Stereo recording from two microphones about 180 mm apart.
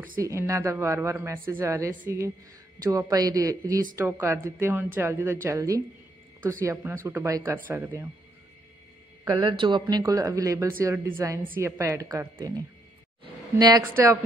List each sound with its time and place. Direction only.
0.2 s speech: 15° right (ahead or behind)
9.2 s speech: 20° right (ahead or behind)